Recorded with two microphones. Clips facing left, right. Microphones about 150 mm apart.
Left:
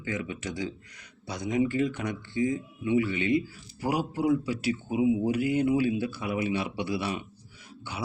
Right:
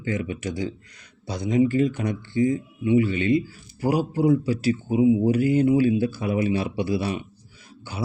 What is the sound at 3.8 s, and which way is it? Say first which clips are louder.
Speech: right 5 dB; 35° right (ahead or behind).